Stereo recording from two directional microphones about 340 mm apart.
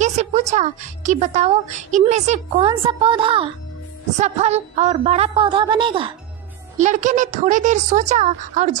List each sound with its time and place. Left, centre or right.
0.0 s a woman's voice: centre